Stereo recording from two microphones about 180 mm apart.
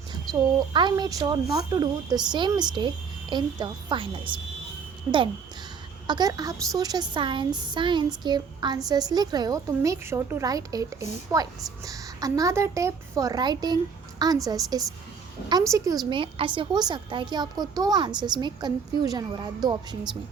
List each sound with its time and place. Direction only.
0.7 s a woman's voice: 25° right (ahead or behind)
6.1 s a woman's voice: 20° right (ahead or behind)